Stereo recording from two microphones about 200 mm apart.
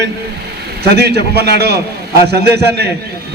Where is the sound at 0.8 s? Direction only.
55° right (ahead or behind).